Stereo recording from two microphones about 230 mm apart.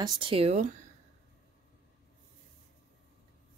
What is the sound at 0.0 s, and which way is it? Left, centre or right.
Speech, right.